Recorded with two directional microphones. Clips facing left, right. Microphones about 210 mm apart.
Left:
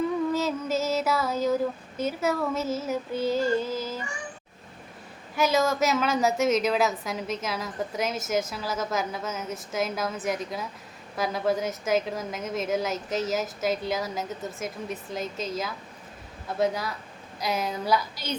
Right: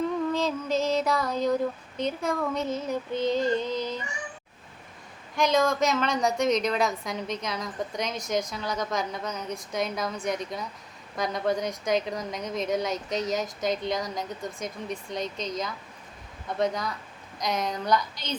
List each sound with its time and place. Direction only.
0.3 s music: 5° left (ahead or behind)
2.0 s a woman's voice: 5° left (ahead or behind)
5.4 s a woman's voice: 5° left (ahead or behind)